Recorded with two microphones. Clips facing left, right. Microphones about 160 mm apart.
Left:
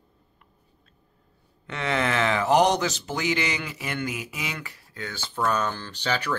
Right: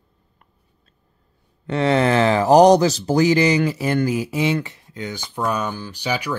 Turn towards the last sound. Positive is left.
turn(degrees=-10)  # may be behind; listen again after turning